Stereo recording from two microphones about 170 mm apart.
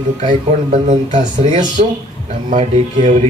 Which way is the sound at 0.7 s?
40° right (ahead or behind).